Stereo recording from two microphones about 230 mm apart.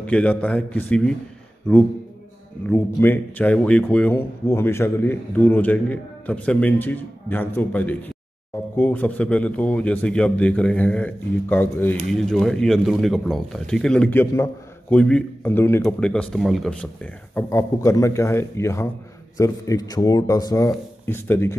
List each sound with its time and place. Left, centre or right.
0.0 s a man's voice: centre